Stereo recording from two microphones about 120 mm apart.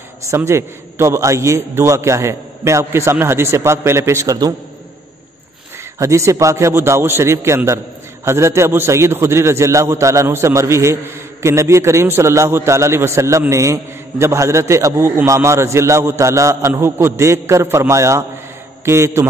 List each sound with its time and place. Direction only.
0.3 s a man's voice: 25° right (ahead or behind)
5.9 s a man's voice: 25° right (ahead or behind)